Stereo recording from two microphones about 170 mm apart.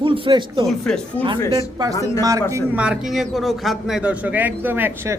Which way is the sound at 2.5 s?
5° right (ahead or behind).